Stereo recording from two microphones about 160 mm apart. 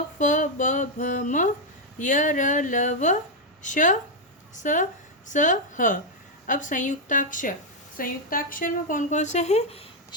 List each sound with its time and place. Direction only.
0.2 s a woman's voice: 50° left (ahead or behind)